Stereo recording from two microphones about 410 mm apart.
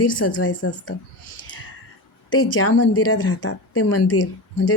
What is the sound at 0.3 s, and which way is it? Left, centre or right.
Speech, left.